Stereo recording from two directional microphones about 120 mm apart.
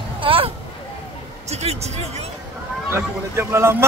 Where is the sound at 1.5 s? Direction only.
65° right (ahead or behind).